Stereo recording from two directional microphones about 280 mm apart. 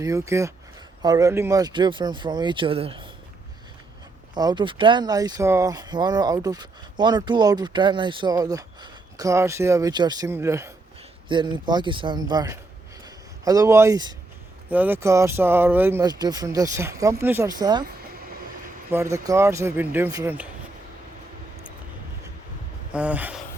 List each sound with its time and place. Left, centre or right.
0.0 s speech: centre
4.4 s speech: centre
18.9 s speech: centre
22.9 s dog: centre